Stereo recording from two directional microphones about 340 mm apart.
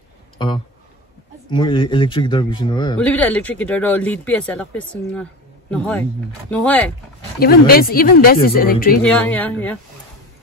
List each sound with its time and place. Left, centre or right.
1.5 s a man's voice: centre
7.3 s speech: left
9.0 s a man's voice: centre